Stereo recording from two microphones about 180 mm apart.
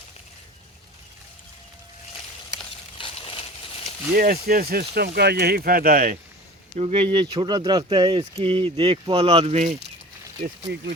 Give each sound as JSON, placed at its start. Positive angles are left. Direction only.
{"t": 3.0, "sound": "a sound", "side_deg": 30}
{"t": 4.1, "sound": "speech", "side_deg": -55}
{"t": 6.7, "sound": "speech", "side_deg": -30}